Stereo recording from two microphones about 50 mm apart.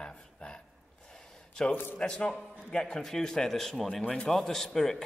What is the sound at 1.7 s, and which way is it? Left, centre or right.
Speech, left.